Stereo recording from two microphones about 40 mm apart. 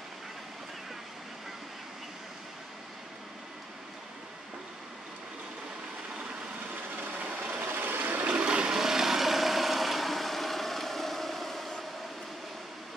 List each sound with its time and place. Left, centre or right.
6.7 s vehicle: right
8.3 s vehicle: right
8.7 s vehicle: centre